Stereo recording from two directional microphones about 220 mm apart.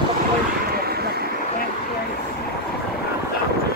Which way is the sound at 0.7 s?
45° right (ahead or behind).